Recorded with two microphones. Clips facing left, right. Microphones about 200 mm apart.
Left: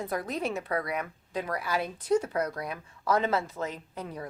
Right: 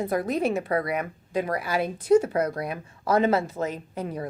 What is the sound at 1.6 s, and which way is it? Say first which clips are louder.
Speech: right 5 dB; 10° right (ahead or behind).